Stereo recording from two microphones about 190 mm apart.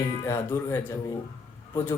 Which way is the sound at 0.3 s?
15° left (ahead or behind).